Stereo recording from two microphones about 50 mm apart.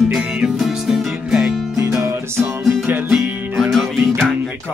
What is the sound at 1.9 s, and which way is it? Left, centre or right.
Music, right.